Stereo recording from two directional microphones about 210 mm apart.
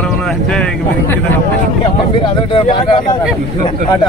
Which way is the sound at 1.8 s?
25° left (ahead or behind).